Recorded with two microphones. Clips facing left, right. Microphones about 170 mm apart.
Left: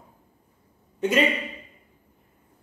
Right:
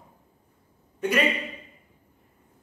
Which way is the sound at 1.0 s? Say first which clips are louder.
Left 2 dB; 25° left (ahead or behind).